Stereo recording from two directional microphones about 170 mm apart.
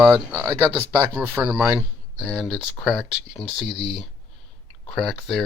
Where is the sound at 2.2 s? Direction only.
5° left (ahead or behind).